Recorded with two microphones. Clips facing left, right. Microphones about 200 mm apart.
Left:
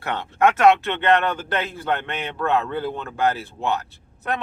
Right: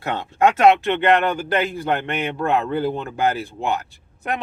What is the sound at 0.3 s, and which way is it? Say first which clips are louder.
A man's voice: right 1 dB; 15° right (ahead or behind).